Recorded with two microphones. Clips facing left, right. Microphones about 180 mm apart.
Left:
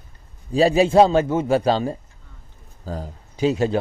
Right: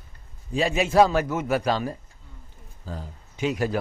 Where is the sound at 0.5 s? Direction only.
35° left (ahead or behind).